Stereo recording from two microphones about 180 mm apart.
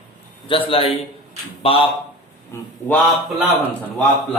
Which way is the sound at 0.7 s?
30° left (ahead or behind).